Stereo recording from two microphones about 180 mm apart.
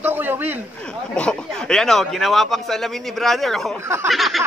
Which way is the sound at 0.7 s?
5° left (ahead or behind).